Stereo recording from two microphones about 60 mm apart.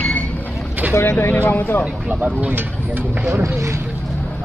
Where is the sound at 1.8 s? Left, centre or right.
Right.